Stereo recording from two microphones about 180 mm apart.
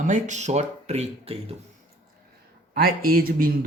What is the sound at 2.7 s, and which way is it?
Speech, 55° right (ahead or behind).